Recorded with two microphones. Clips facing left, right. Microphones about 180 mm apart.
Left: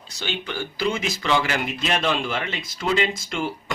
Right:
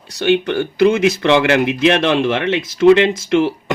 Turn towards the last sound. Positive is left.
turn(degrees=-75)  # may be behind; listen again after turning